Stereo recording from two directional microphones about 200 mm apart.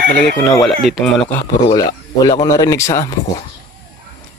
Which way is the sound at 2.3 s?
20° left (ahead or behind).